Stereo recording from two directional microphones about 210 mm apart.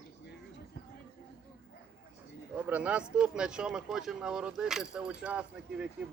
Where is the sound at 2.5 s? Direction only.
5° right (ahead or behind).